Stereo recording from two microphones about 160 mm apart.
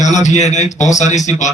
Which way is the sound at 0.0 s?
50° left (ahead or behind).